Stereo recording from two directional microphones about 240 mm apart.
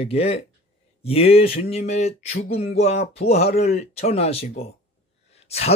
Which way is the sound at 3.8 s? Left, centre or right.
Left.